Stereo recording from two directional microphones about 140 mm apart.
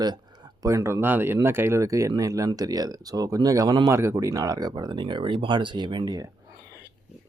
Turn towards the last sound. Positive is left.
turn(degrees=-25)  # may be behind; listen again after turning